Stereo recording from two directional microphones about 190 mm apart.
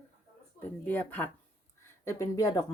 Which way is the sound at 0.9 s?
10° left (ahead or behind).